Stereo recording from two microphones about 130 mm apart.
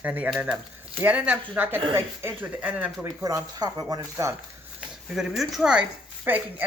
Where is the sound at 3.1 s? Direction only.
30° right (ahead or behind).